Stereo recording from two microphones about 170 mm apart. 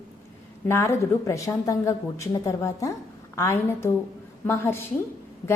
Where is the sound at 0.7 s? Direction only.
15° left (ahead or behind).